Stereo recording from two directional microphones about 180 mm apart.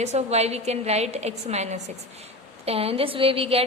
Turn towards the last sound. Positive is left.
turn(degrees=-30)  # may be behind; listen again after turning